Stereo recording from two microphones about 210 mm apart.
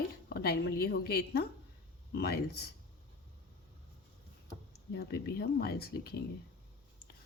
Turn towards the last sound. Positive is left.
turn(degrees=50)  # may be behind; listen again after turning